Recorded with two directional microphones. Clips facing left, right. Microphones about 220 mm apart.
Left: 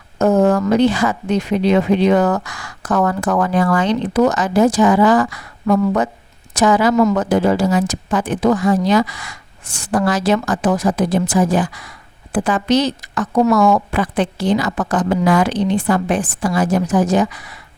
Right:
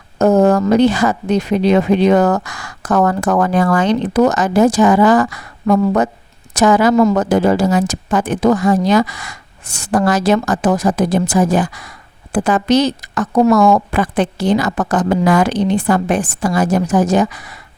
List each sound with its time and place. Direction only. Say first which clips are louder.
0.2 s speech: right 2 dB; 40° right (ahead or behind)